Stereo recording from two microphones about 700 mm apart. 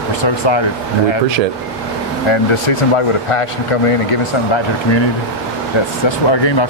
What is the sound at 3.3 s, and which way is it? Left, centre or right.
Speech, left.